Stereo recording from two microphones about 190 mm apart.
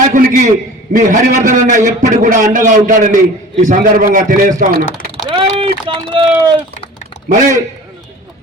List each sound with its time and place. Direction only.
0.0 s a man's voice: 45° right (ahead or behind)
5.3 s speech: 30° right (ahead or behind)
7.3 s a man's voice: 45° right (ahead or behind)